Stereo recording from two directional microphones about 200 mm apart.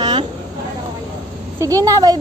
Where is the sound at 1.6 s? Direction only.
15° right (ahead or behind).